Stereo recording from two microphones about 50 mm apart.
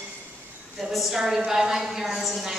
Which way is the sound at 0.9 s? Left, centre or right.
Centre.